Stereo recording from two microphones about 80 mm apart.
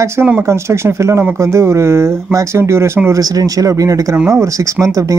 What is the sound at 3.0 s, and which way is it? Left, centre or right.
Speech, right.